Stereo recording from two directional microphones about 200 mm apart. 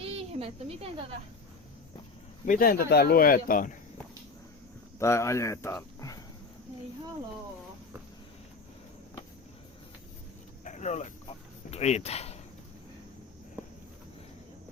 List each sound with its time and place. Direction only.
0.0 s cricket: 30° right (ahead or behind)
2.5 s speech: 45° left (ahead or behind)
4.9 s speech: 15° left (ahead or behind)
10.6 s a sound: 35° left (ahead or behind)
11.7 s speech: 35° left (ahead or behind)